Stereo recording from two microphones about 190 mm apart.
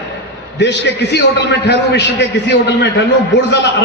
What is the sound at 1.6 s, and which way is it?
Speech, 65° left (ahead or behind).